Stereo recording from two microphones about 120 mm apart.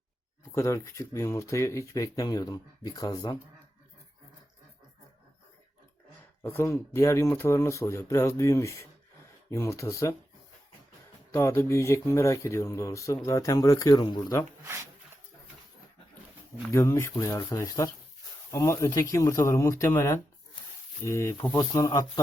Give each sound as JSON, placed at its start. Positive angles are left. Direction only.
{"t": 0.5, "sound": "speech", "side_deg": 25}
{"t": 6.4, "sound": "speech", "side_deg": 20}
{"t": 11.3, "sound": "speech", "side_deg": 25}
{"t": 16.7, "sound": "speech", "side_deg": 25}